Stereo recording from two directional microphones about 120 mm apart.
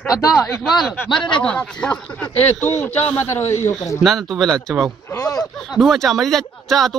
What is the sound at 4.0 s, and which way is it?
Speech, centre (ahead or behind).